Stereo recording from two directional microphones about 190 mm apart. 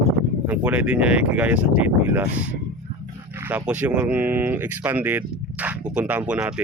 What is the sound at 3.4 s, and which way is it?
Speech, 10° right (ahead or behind).